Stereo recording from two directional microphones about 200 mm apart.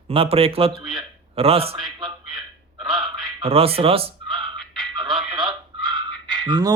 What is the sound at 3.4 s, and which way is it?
Speech, 30° right (ahead or behind).